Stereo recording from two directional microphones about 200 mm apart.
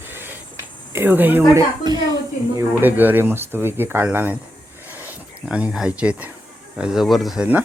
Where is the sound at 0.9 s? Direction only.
10° right (ahead or behind).